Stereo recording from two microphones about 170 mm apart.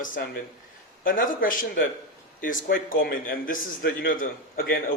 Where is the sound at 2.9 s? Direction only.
55° left (ahead or behind).